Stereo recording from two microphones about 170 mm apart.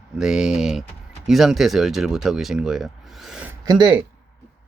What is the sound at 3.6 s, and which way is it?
Speech, 20° right (ahead or behind).